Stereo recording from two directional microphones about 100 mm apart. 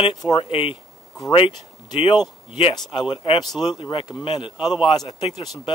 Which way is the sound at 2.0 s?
45° left (ahead or behind).